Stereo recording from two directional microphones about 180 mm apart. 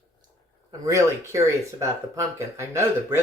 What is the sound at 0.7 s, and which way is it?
Speech, 20° right (ahead or behind).